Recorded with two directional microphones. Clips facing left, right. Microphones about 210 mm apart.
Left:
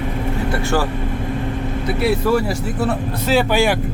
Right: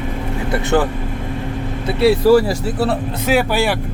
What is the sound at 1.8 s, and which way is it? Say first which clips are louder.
Speech: right 6 dB; 30° right (ahead or behind).